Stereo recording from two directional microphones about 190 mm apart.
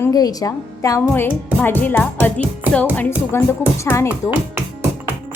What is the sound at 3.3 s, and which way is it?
Speech, 15° left (ahead or behind).